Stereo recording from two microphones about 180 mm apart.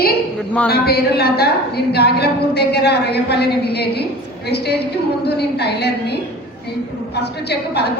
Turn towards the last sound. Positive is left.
turn(degrees=65)  # may be behind; listen again after turning